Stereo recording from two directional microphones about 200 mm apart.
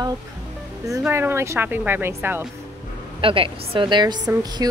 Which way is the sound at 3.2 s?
25° right (ahead or behind).